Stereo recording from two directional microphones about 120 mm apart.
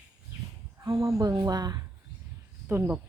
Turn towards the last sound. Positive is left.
turn(degrees=-20)  # may be behind; listen again after turning